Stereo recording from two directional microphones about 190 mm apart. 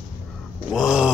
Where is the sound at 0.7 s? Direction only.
5° right (ahead or behind).